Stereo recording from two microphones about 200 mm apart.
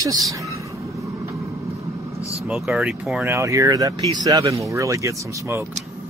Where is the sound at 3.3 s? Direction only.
15° right (ahead or behind).